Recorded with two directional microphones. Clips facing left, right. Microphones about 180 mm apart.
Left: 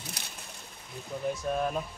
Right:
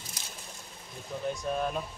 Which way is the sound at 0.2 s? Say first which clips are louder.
Left 1 dB; 65° left (ahead or behind).